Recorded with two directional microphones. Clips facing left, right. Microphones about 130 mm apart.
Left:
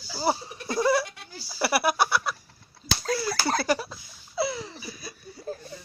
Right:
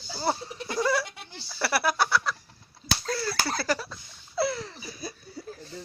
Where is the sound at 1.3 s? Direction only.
10° left (ahead or behind).